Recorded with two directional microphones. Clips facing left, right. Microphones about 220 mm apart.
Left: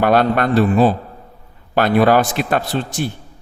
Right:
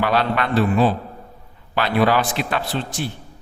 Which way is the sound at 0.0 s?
50° left (ahead or behind).